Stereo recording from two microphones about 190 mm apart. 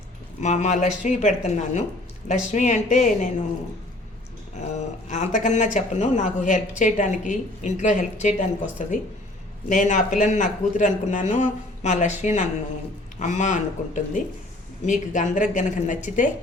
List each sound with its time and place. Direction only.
0.4 s speech: 35° left (ahead or behind)
4.6 s speech: 40° left (ahead or behind)